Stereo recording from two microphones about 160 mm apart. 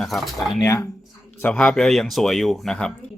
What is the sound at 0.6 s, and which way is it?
Speech, 20° left (ahead or behind).